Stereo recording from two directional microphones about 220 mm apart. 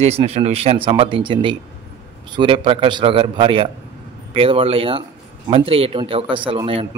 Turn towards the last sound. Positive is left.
turn(degrees=-25)  # may be behind; listen again after turning